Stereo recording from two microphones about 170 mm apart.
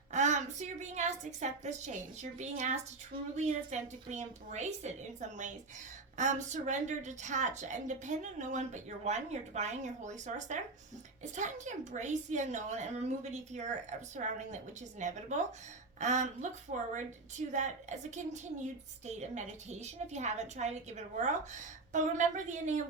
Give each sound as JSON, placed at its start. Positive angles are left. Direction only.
{"t": 0.1, "sound": "a woman's voice", "side_deg": -45}